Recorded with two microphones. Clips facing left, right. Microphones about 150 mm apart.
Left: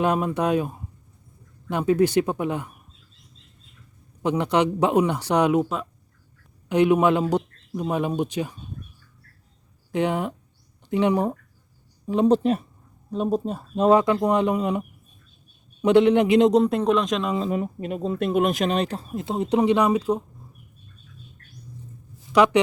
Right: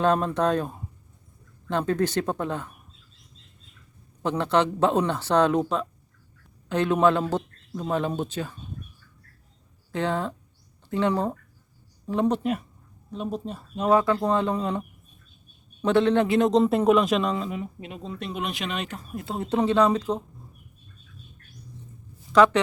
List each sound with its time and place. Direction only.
0.0 s speech: 10° left (ahead or behind)
4.2 s speech: 15° left (ahead or behind)
9.9 s speech: 15° left (ahead or behind)
12.3 s speech: 30° left (ahead or behind)
13.8 s speech: 20° left (ahead or behind)
16.6 s speech: centre (ahead or behind)
17.5 s speech: 45° left (ahead or behind); by 20.2 s 10° left (ahead or behind)
22.3 s speech: 15° left (ahead or behind)